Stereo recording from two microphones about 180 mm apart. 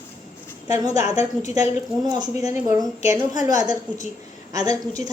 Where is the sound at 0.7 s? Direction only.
20° right (ahead or behind).